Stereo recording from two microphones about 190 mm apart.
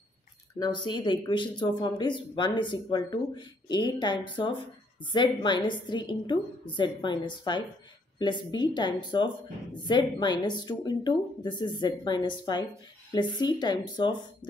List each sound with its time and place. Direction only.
0.6 s speech: 25° left (ahead or behind)